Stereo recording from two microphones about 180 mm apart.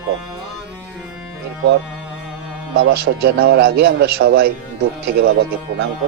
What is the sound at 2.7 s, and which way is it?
A man's voice, 75° right (ahead or behind).